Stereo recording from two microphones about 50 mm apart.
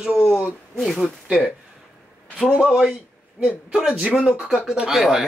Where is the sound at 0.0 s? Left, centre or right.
Centre.